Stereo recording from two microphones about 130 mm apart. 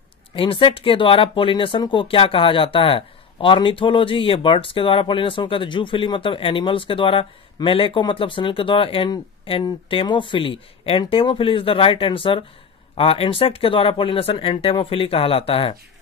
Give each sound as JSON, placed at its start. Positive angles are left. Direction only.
{"t": 0.4, "sound": "speech", "side_deg": 40}